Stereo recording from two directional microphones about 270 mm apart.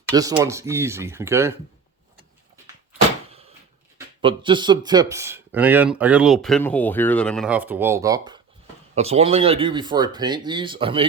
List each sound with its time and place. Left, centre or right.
0.1 s speech: centre
3.9 s speech: centre